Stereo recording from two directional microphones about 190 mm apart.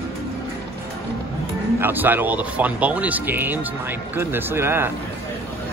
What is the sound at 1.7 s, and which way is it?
Speech, 10° right (ahead or behind).